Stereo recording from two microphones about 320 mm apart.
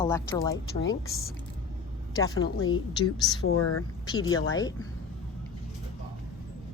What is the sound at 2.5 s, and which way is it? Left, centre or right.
Speech, left.